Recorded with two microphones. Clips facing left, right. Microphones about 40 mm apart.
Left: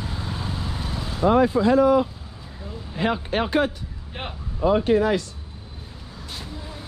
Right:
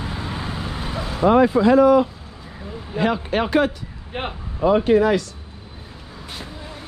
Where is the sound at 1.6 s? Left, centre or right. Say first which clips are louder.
Right 4 dB; right.